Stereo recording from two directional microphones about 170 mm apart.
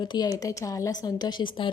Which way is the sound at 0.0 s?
25° left (ahead or behind).